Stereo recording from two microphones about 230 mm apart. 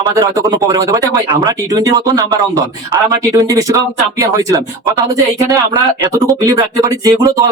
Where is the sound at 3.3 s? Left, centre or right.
Centre.